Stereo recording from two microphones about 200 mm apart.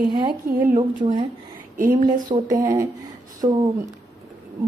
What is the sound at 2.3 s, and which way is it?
A woman's voice, 20° right (ahead or behind).